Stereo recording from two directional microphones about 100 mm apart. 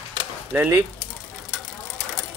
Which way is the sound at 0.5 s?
20° right (ahead or behind).